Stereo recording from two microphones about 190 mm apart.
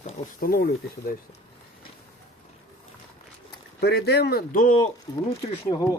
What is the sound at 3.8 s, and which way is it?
Speech, 60° left (ahead or behind).